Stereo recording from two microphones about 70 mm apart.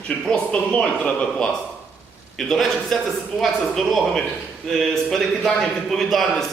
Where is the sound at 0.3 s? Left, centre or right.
Centre.